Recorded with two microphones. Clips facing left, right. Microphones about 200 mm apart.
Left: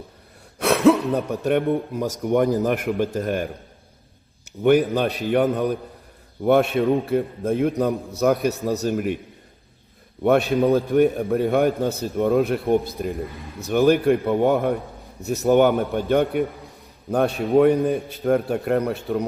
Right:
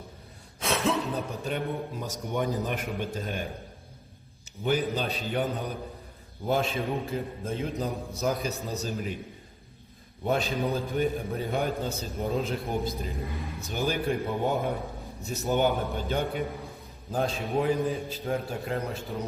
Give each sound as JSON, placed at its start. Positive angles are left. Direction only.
{"t": 0.6, "sound": "speech", "side_deg": 70}
{"t": 4.6, "sound": "a man's voice", "side_deg": 65}
{"t": 10.2, "sound": "a man's voice", "side_deg": 65}